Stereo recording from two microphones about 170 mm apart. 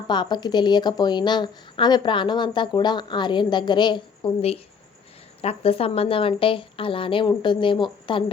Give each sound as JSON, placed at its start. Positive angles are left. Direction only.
{"t": 0.1, "sound": "a woman's voice", "side_deg": 25}